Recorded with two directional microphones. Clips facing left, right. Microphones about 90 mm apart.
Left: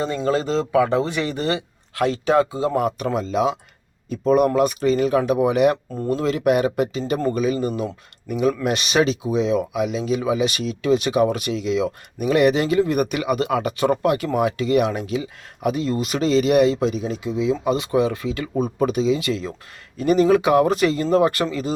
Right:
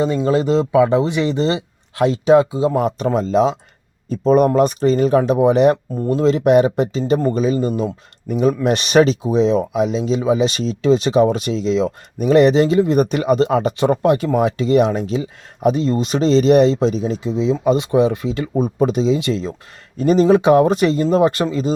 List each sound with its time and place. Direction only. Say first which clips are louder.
0.3 s speech: right 2 dB; 20° right (ahead or behind)
3.1 s speech: right 8 dB; 40° right (ahead or behind); by 21.7 s 20° right (ahead or behind)